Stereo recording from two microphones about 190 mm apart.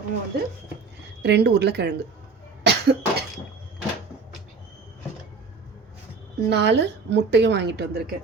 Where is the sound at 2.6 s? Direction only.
60° right (ahead or behind).